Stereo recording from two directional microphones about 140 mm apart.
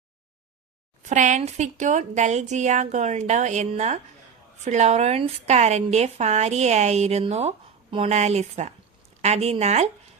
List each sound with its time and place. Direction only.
1.0 s speech: 60° right (ahead or behind)
7.9 s speech: 40° right (ahead or behind)
8.1 s speech: 50° right (ahead or behind)